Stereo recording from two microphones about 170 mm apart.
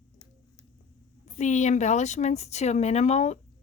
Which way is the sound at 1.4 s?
45° left (ahead or behind).